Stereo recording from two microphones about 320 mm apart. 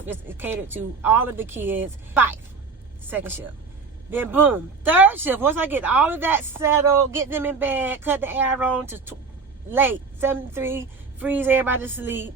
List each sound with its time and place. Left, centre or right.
0.1 s speech: centre